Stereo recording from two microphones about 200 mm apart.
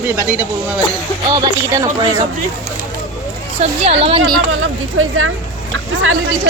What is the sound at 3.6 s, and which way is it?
Speech, 30° right (ahead or behind).